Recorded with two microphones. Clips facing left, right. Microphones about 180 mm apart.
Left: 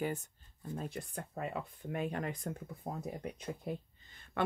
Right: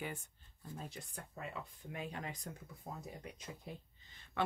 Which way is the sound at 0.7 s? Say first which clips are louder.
Left 8 dB; 55° left (ahead or behind).